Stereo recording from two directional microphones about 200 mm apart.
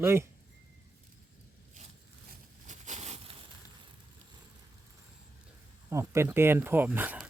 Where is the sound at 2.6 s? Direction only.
35° right (ahead or behind).